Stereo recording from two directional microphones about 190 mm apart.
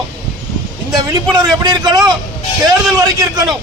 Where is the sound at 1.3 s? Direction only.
20° right (ahead or behind).